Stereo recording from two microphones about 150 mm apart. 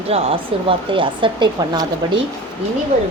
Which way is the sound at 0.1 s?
35° right (ahead or behind).